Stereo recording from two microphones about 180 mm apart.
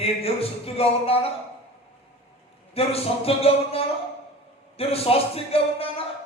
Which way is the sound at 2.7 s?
35° left (ahead or behind).